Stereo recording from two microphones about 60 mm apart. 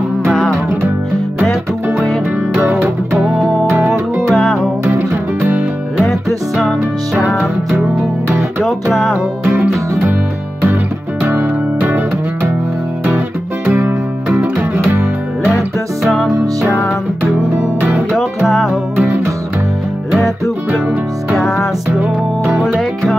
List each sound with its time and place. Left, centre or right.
3.7 s music: right
4.3 s music: centre
4.8 s music: right
5.9 s music: centre
8.6 s music: centre
11.2 s music: right
13.7 s music: right
16.0 s music: centre
17.7 s music: right
18.4 s music: centre
21.4 s music: centre
22.0 s music: right